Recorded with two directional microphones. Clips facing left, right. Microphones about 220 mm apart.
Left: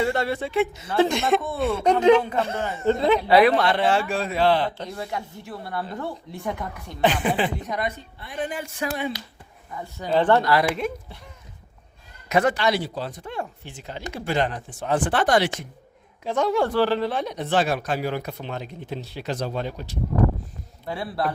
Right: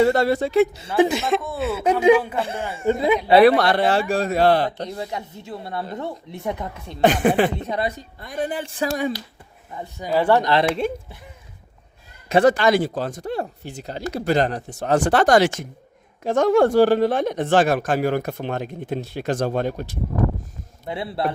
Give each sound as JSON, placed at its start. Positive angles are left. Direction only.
{"t": 0.0, "sound": "speech", "side_deg": -40}
{"t": 0.9, "sound": "a man's voice", "side_deg": -10}
{"t": 3.2, "sound": "speech", "side_deg": -30}
{"t": 3.6, "sound": "speech", "side_deg": -40}
{"t": 4.9, "sound": "speech", "side_deg": -20}
{"t": 7.0, "sound": "speech", "side_deg": -45}
{"t": 7.6, "sound": "speech", "side_deg": -30}
{"t": 9.7, "sound": "speech", "side_deg": -25}
{"t": 10.1, "sound": "a man's voice", "side_deg": -10}
{"t": 10.4, "sound": "speech", "side_deg": -25}
{"t": 12.3, "sound": "speech", "side_deg": -30}
{"t": 12.5, "sound": "speech", "side_deg": -50}
{"t": 20.8, "sound": "speech", "side_deg": -20}